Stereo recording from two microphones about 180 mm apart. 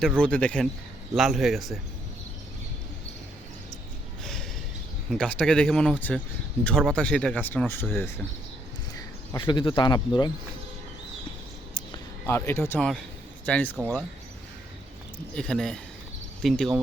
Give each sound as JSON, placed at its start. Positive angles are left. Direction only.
{"t": 0.2, "sound": "speech", "side_deg": 5}
{"t": 4.2, "sound": "a sound", "side_deg": 0}
{"t": 5.0, "sound": "speech", "side_deg": 5}
{"t": 9.4, "sound": "speech", "side_deg": 25}
{"t": 12.2, "sound": "speech", "side_deg": 10}
{"t": 15.4, "sound": "speech", "side_deg": 5}